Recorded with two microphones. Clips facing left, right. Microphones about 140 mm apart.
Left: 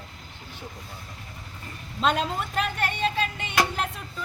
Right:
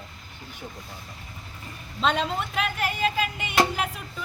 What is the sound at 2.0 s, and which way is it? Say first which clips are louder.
Speech: even; 5° left (ahead or behind).